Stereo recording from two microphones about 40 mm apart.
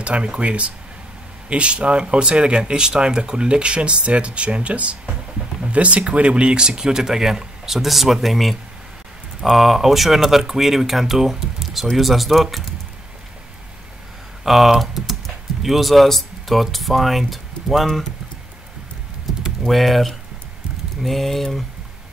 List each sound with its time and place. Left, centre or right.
0.0 s speech: right
5.0 s a sound: centre
5.7 s speech: right; by 12.6 s centre
14.4 s speech: centre
19.7 s speech: centre